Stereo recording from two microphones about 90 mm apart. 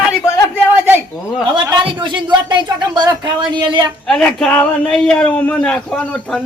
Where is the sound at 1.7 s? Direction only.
60° right (ahead or behind).